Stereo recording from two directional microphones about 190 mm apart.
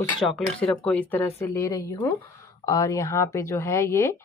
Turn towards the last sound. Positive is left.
turn(degrees=15)  # may be behind; listen again after turning